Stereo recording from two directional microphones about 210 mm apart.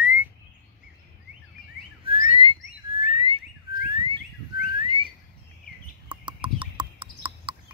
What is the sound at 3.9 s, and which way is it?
Bird, 25° right (ahead or behind).